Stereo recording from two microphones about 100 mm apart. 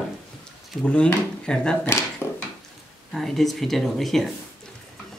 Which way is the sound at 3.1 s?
Centre (ahead or behind).